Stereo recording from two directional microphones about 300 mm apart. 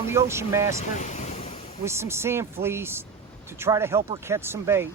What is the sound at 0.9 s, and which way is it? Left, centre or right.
Waves, left.